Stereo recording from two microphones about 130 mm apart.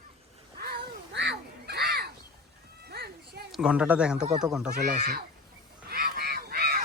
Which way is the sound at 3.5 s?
5° right (ahead or behind).